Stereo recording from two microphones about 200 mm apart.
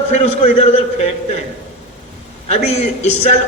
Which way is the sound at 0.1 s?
30° left (ahead or behind).